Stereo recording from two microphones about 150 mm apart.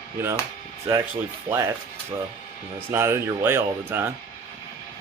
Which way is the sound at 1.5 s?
15° right (ahead or behind).